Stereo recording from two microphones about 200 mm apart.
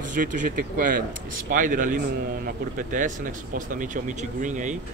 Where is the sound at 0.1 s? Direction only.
40° right (ahead or behind).